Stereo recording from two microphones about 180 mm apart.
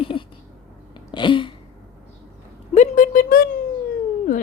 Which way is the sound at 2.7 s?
45° left (ahead or behind).